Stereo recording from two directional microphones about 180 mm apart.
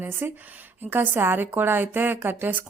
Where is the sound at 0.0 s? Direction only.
10° right (ahead or behind).